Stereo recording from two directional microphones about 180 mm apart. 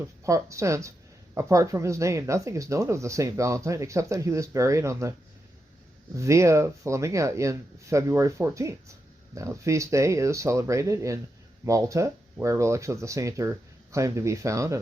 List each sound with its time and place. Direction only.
0.3 s speech: 15° right (ahead or behind)
6.1 s speech: 15° right (ahead or behind)